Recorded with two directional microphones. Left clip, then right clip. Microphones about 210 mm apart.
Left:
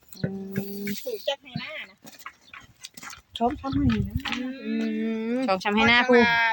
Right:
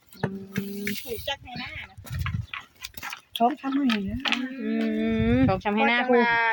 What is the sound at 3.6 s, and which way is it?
Speech, 40° right (ahead or behind).